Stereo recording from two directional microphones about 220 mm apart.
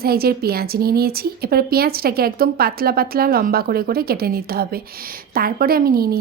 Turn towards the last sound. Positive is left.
turn(degrees=-45)  # may be behind; listen again after turning